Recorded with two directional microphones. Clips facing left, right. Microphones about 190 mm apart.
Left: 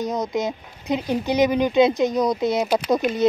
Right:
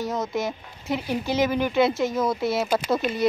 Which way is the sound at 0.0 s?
15° left (ahead or behind).